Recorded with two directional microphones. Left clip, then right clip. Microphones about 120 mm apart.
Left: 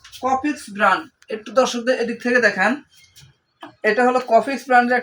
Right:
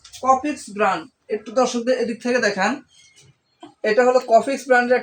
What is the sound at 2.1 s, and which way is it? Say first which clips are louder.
Speech: left 3 dB; 30° right (ahead or behind).